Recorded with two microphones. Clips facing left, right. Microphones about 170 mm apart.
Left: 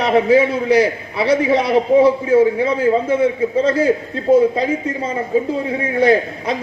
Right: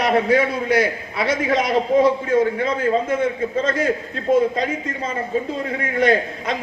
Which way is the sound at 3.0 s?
30° left (ahead or behind).